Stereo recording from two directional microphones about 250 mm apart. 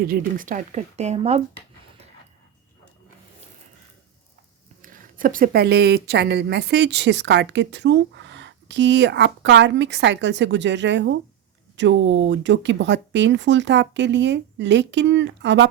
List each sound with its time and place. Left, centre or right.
0.0 s speech: right
4.8 s a woman's voice: right